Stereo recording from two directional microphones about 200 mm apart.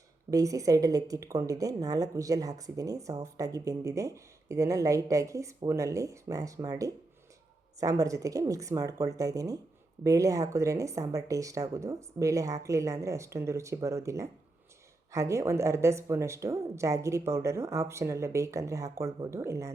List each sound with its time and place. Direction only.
0.3 s a woman's voice: 15° right (ahead or behind)